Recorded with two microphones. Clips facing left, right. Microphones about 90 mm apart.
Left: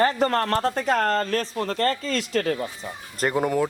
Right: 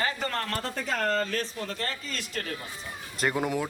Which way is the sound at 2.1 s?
90° left.